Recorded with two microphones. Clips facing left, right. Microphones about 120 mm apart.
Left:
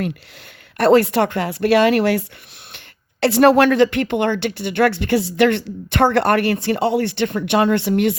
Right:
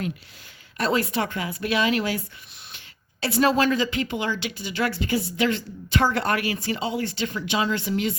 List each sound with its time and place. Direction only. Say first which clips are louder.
0.8 s speech: left 10 dB; 65° left (ahead or behind)